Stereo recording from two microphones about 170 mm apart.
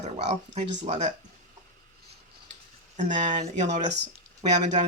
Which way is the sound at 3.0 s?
45° right (ahead or behind).